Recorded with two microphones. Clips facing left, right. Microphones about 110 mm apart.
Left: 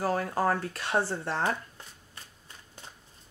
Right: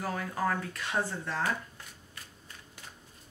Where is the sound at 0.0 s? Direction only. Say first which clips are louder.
Left 5 dB; 35° left (ahead or behind).